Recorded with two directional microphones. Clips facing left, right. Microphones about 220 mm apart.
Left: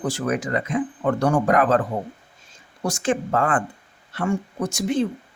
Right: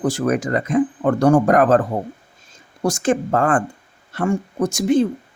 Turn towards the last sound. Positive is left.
turn(degrees=-45)  # may be behind; listen again after turning